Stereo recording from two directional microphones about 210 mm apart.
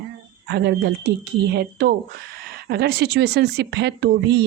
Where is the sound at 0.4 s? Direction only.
50° right (ahead or behind).